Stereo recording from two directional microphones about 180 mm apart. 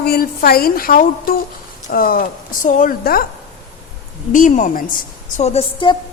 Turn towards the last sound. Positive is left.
turn(degrees=30)  # may be behind; listen again after turning